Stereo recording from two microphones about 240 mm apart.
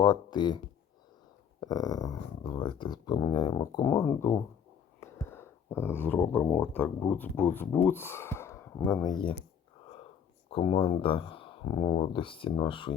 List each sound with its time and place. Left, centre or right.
0.0 s speech: centre
1.6 s speech: centre
4.9 s whispering: centre
5.7 s speech: centre
10.5 s speech: left